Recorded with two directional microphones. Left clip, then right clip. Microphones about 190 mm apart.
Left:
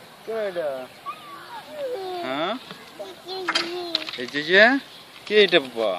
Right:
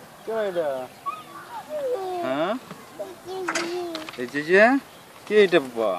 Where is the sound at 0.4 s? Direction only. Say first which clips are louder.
Right 2 dB; 45° right (ahead or behind).